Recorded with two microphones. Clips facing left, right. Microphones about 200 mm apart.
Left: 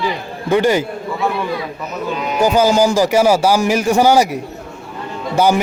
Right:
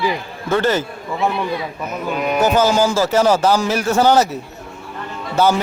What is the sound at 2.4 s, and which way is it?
Speech, 10° left (ahead or behind).